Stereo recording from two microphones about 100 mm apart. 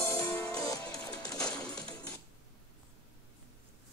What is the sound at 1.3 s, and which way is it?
Music, 10° left (ahead or behind).